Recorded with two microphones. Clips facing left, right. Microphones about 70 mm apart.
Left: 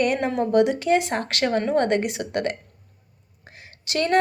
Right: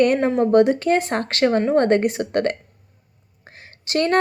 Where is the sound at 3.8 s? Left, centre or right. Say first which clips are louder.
Right 2 dB; right.